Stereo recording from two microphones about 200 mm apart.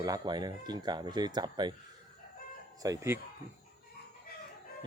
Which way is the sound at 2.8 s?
15° right (ahead or behind).